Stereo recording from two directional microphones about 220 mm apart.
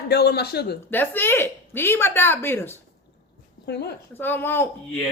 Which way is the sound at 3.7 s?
50° left (ahead or behind).